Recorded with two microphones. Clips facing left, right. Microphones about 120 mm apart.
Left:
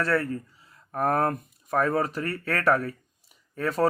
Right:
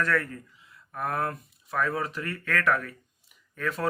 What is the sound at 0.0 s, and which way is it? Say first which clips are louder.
Speech: left 2 dB; 30° left (ahead or behind).